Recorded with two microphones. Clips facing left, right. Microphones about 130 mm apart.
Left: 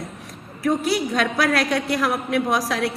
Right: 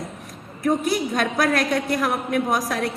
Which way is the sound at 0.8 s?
50° right (ahead or behind).